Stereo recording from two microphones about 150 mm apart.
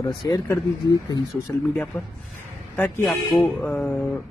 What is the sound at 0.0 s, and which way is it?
Speech, 30° left (ahead or behind).